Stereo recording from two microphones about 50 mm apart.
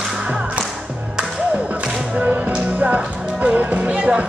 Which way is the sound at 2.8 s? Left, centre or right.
Right.